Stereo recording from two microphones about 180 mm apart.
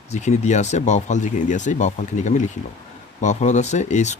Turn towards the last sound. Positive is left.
turn(degrees=40)  # may be behind; listen again after turning